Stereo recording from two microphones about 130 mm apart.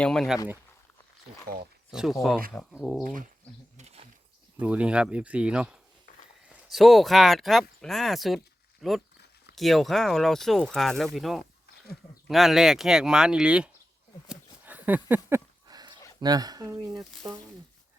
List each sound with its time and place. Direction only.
0.0 s speech: 5° left (ahead or behind)
1.9 s speech: 5° right (ahead or behind)
3.8 s wild animals: 55° right (ahead or behind)
4.6 s speech: 10° right (ahead or behind)
14.3 s a sound: 15° right (ahead or behind)
15.6 s a sound: 30° right (ahead or behind)
16.2 s speech: 30° right (ahead or behind)